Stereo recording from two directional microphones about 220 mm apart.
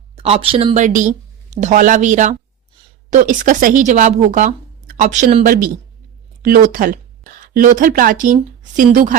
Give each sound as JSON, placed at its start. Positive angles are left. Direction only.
{"t": 0.2, "sound": "speech", "side_deg": -25}